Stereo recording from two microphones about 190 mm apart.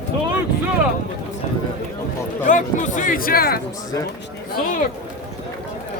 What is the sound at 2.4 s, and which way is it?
Speech, 40° left (ahead or behind).